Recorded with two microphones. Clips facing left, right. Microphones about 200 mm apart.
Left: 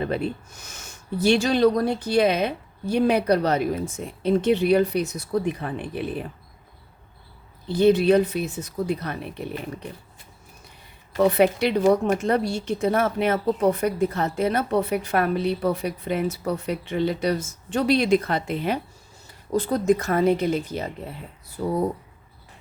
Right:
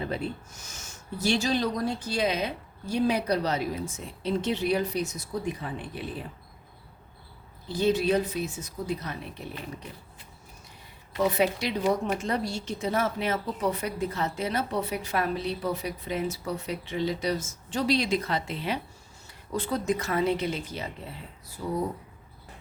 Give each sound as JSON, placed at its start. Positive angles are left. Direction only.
{"t": 0.0, "sound": "speech", "side_deg": 60}
{"t": 7.7, "sound": "speech", "side_deg": 60}
{"t": 11.2, "sound": "speech", "side_deg": 60}
{"t": 19.5, "sound": "speech", "side_deg": 40}
{"t": 21.6, "sound": "speech", "side_deg": 65}